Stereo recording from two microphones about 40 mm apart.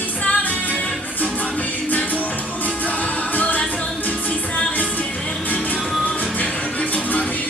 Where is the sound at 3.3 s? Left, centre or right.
Left.